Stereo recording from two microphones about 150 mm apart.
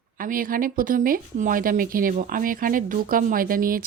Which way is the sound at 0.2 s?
70° right (ahead or behind).